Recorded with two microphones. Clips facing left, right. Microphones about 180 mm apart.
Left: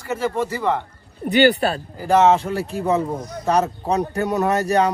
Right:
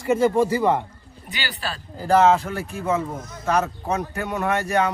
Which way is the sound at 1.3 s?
60° left (ahead or behind).